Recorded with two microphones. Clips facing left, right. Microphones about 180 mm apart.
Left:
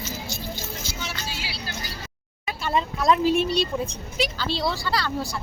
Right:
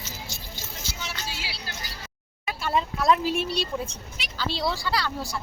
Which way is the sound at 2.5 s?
5° right (ahead or behind).